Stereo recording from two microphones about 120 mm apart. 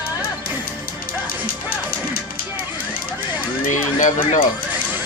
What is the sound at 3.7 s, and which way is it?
Speech, 90° left.